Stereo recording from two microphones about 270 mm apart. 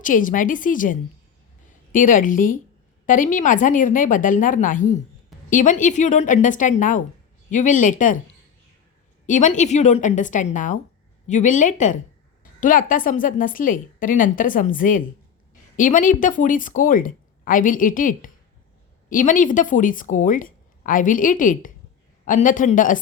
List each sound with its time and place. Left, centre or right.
0.0 s speech: left
9.2 s a woman's voice: left